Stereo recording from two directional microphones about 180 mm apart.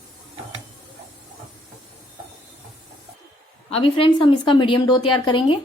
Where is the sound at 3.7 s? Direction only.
30° left (ahead or behind).